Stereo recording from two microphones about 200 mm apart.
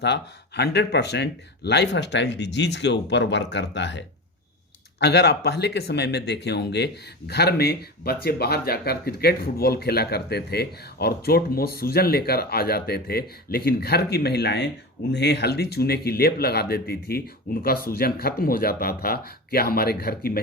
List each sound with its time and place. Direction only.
0.0 s speech: 55° left (ahead or behind)